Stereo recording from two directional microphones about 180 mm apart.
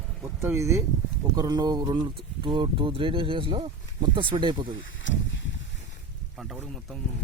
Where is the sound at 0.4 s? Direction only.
15° right (ahead or behind).